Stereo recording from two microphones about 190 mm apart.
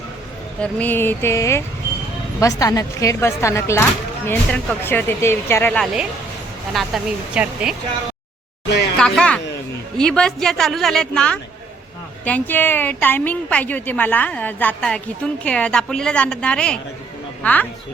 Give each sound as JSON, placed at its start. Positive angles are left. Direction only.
{"t": 0.6, "sound": "a woman's voice", "side_deg": 10}
{"t": 5.8, "sound": "speech", "side_deg": -5}
{"t": 9.0, "sound": "a sound", "side_deg": 5}
{"t": 10.0, "sound": "a woman's voice", "side_deg": 5}